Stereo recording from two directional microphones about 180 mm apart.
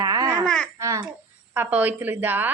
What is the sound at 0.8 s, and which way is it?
Speech, 15° right (ahead or behind).